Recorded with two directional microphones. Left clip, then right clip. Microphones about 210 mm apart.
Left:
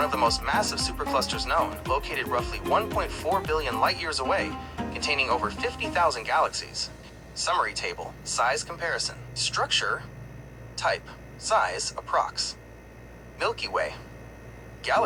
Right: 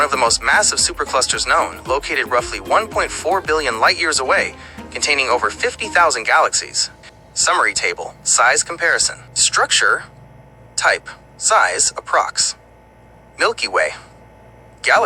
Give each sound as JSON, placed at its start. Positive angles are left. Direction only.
{"t": 0.0, "sound": "a man's voice", "side_deg": -50}